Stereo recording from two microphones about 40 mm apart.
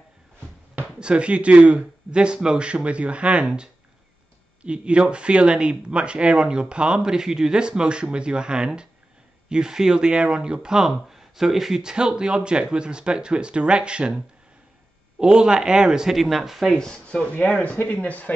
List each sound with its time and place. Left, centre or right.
0.9 s speech: right
10.9 s speech: centre; by 14.1 s right
15.1 s speech: right
16.2 s speech: centre
16.7 s speech: centre
17.0 s speech: left